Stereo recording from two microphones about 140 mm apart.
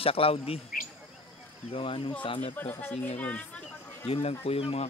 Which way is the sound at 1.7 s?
40° left (ahead or behind).